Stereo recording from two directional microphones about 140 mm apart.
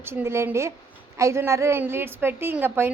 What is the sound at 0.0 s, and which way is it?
A woman's voice, 15° right (ahead or behind).